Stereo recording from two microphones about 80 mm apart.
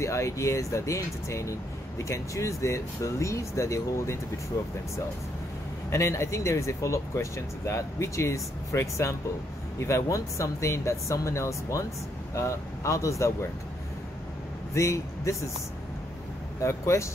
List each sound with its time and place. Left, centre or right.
0.0 s speech: left
5.9 s speech: left
14.7 s speech: left
16.6 s speech: left